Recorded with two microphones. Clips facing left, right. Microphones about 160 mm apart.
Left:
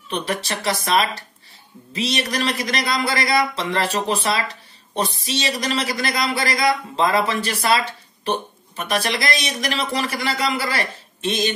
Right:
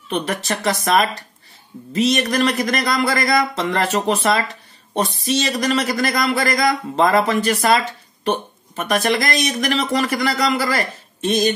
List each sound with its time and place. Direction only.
0.1 s a man's voice: 45° right (ahead or behind)